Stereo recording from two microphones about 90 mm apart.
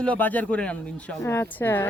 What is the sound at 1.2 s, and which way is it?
Speech, 30° left (ahead or behind).